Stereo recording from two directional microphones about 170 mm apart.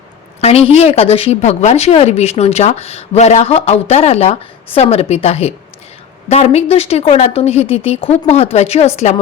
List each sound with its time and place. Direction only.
0.4 s speech: 35° left (ahead or behind)